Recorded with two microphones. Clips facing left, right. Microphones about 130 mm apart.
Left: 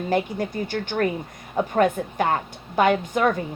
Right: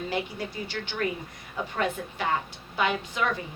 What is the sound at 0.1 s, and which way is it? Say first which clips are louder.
Speech: left 8 dB; 50° left (ahead or behind).